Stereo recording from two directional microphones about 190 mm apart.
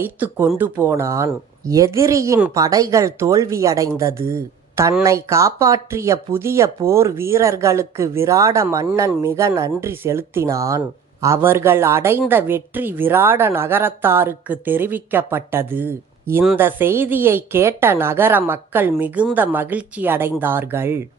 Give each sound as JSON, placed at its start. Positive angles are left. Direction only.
{"t": 0.0, "sound": "speech", "side_deg": -10}